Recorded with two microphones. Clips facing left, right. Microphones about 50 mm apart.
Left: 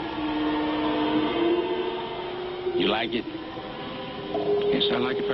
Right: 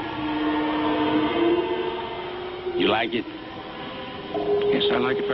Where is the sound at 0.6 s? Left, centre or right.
Centre.